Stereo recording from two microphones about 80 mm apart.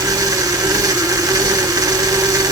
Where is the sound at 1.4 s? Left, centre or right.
Right.